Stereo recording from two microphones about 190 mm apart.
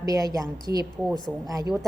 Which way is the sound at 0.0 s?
20° right (ahead or behind).